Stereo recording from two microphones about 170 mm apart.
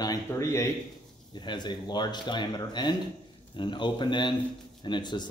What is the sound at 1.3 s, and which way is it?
Speech, 25° left (ahead or behind).